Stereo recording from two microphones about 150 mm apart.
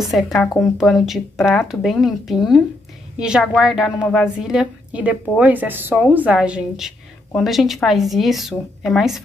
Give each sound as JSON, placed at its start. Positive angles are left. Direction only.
{"t": 0.0, "sound": "a woman's voice", "side_deg": 0}